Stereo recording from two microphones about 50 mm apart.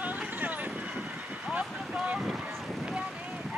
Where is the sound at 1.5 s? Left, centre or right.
Right.